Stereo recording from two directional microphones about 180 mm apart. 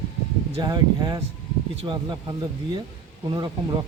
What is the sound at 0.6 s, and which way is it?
Speech, 25° right (ahead or behind).